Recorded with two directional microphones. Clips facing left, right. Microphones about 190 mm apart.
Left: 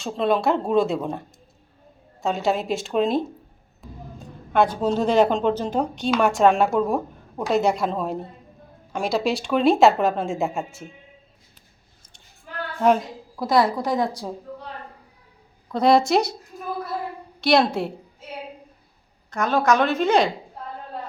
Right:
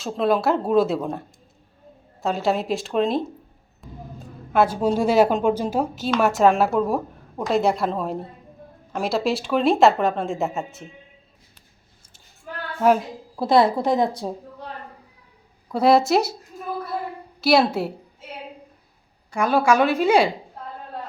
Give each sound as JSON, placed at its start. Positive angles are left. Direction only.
{"t": 0.0, "sound": "speech", "side_deg": 0}
{"t": 2.2, "sound": "speech", "side_deg": 0}
{"t": 4.5, "sound": "a woman's voice", "side_deg": -5}
{"t": 12.8, "sound": "a woman's voice", "side_deg": -5}
{"t": 13.3, "sound": "a woman's voice", "side_deg": -25}
{"t": 15.7, "sound": "speech", "side_deg": -5}
{"t": 17.4, "sound": "speech", "side_deg": -5}
{"t": 19.3, "sound": "a woman's voice", "side_deg": -10}